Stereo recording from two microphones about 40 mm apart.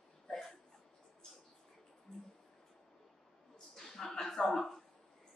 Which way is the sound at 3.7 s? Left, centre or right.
Centre.